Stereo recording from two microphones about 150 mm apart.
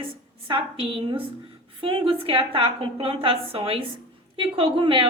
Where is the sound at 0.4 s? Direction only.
35° right (ahead or behind).